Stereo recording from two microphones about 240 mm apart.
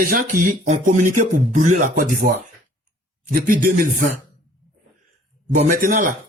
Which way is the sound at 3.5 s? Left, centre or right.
Right.